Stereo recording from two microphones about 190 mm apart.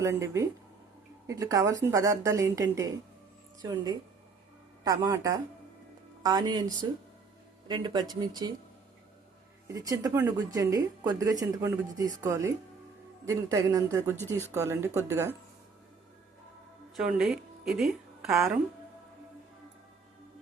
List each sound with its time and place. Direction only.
0.0 s a woman's voice: 15° right (ahead or behind)
7.7 s speech: 25° right (ahead or behind)
9.6 s a woman's voice: 20° right (ahead or behind)
16.9 s a woman's voice: 5° right (ahead or behind)